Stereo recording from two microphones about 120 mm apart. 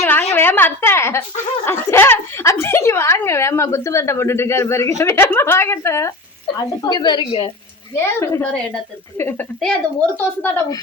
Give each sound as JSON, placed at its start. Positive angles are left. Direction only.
{"t": 0.0, "sound": "a woman's voice", "side_deg": 15}
{"t": 6.8, "sound": "a woman's voice", "side_deg": 40}
{"t": 7.9, "sound": "a woman's voice", "side_deg": 20}
{"t": 9.6, "sound": "a woman's voice", "side_deg": 5}